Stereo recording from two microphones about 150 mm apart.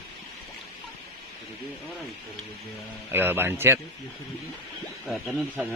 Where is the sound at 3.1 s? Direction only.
15° right (ahead or behind).